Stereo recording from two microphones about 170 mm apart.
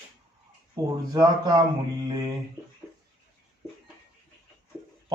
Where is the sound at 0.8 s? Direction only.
25° right (ahead or behind).